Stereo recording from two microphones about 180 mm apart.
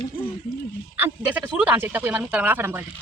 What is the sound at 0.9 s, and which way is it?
Speech, 10° right (ahead or behind).